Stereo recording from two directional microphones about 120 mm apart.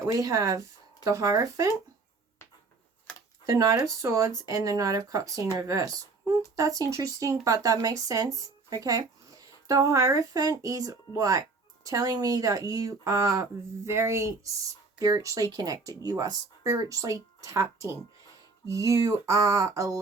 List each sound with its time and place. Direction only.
0.0 s speech: 25° right (ahead or behind)
3.4 s speech: 25° right (ahead or behind)